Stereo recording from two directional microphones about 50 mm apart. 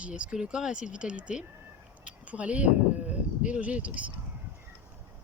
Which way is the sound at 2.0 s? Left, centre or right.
Right.